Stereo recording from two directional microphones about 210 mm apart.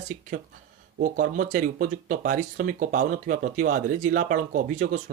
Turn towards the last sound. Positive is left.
turn(degrees=-40)  # may be behind; listen again after turning